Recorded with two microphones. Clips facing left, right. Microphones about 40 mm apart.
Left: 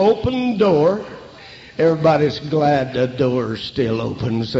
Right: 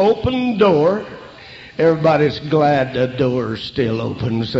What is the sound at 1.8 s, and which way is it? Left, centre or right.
Mantra, centre.